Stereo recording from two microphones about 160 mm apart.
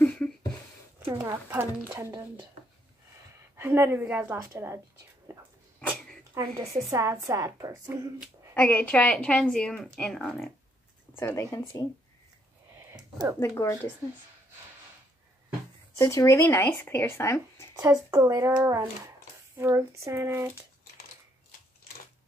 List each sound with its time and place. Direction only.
0.0 s a sound: 5° left (ahead or behind)
0.9 s a woman's voice: 15° right (ahead or behind)
3.5 s a woman's voice: 15° right (ahead or behind)
5.3 s dog: 15° right (ahead or behind)
5.8 s a sound: 5° left (ahead or behind)
6.3 s a woman's voice: 20° right (ahead or behind)
8.5 s speech: 10° left (ahead or behind)
11.1 s speech: 15° left (ahead or behind)
13.4 s speech: 20° left (ahead or behind)
16.0 s speech: 20° left (ahead or behind)
17.7 s a woman's voice: 20° right (ahead or behind)